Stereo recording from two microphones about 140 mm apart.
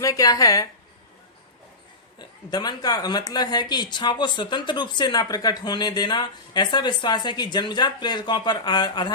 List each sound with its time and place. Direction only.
0.0 s a woman's voice: 25° left (ahead or behind)
2.1 s speech: 30° left (ahead or behind)